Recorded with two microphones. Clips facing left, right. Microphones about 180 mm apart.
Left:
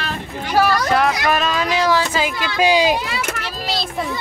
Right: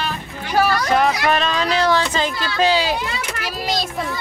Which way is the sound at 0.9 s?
Centre (ahead or behind).